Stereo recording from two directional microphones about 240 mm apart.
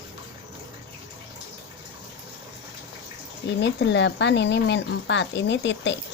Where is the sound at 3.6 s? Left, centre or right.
Left.